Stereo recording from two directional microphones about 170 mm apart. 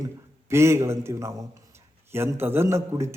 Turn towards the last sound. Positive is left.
turn(degrees=-15)  # may be behind; listen again after turning